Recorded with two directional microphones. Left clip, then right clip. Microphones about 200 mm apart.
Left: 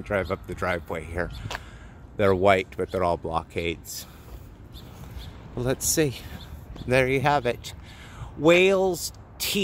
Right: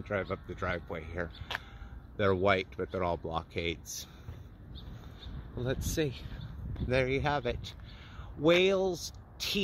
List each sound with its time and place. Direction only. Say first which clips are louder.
0.0 s speech: left 8 dB; 10° left (ahead or behind)
5.6 s speech: left 9 dB; 20° left (ahead or behind)